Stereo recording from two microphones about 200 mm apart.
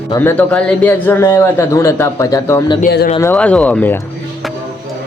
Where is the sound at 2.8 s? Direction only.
55° left (ahead or behind).